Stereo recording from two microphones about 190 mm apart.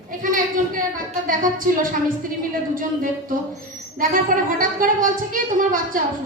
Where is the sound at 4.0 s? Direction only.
45° right (ahead or behind).